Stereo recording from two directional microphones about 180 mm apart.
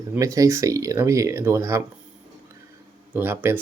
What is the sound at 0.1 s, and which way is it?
Speech, 20° right (ahead or behind).